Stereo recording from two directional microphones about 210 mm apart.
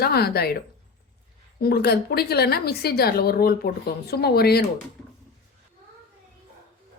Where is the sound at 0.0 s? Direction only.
50° left (ahead or behind).